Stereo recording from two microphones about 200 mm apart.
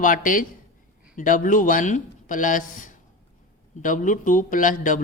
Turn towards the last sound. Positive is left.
turn(degrees=40)  # may be behind; listen again after turning